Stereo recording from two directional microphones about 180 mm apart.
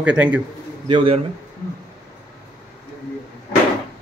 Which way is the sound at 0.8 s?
30° right (ahead or behind).